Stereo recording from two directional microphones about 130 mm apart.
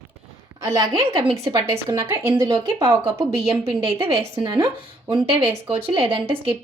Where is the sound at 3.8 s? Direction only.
50° right (ahead or behind).